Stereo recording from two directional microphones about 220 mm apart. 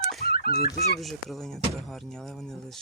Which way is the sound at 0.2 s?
45° left (ahead or behind).